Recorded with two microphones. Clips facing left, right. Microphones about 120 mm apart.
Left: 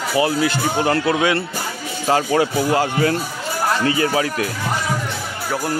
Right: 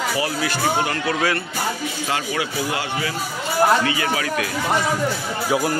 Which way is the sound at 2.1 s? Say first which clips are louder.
Left 10 dB; 40° left (ahead or behind).